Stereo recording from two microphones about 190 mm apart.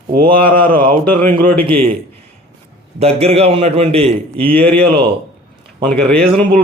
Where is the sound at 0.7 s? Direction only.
45° right (ahead or behind).